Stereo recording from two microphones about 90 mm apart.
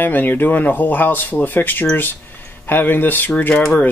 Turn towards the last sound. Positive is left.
turn(degrees=20)  # may be behind; listen again after turning